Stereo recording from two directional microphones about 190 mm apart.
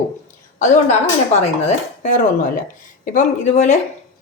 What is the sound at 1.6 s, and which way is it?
Speech, 45° left (ahead or behind).